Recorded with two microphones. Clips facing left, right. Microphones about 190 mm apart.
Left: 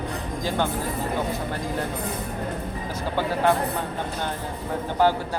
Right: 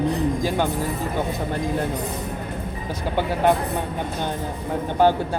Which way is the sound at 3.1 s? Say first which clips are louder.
Right 2 dB; 20° right (ahead or behind).